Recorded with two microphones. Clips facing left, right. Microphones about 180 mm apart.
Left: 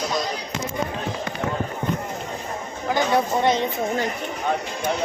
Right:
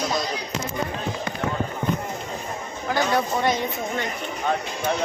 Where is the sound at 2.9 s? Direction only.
25° left (ahead or behind).